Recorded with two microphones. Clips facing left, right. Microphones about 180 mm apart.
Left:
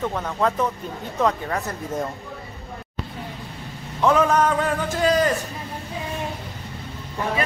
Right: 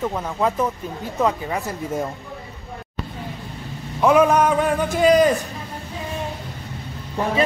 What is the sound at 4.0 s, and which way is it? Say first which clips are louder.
Speech: right 3 dB; 10° right (ahead or behind).